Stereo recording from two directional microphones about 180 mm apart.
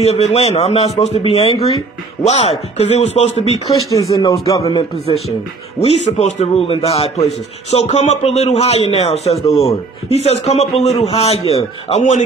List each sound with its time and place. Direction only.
0.0 s a man's voice: 35° left (ahead or behind)
2.8 s a man's voice: 35° left (ahead or behind)
3.9 s speech: 20° left (ahead or behind)
5.8 s a man's voice: 35° left (ahead or behind)